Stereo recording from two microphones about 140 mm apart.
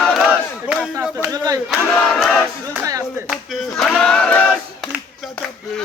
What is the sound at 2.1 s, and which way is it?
Battle cry, 5° right (ahead or behind).